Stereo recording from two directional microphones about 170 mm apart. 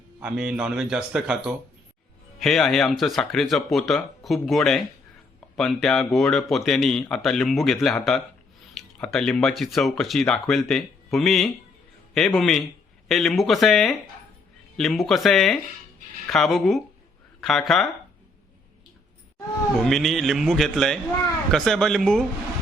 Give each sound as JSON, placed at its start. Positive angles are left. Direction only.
{"t": 0.2, "sound": "speech", "side_deg": -5}
{"t": 19.8, "sound": "speech", "side_deg": 0}